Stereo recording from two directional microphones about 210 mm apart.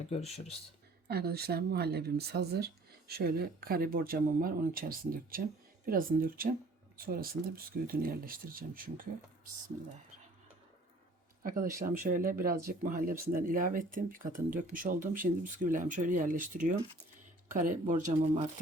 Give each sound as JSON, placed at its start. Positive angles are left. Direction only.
{"t": 1.0, "sound": "speech", "side_deg": -50}
{"t": 11.4, "sound": "speech", "side_deg": -40}